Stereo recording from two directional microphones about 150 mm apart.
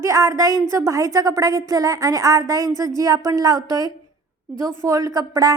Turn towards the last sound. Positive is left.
turn(degrees=-25)  # may be behind; listen again after turning